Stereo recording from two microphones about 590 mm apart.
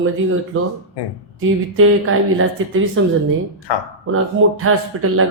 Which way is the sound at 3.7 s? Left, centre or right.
Left.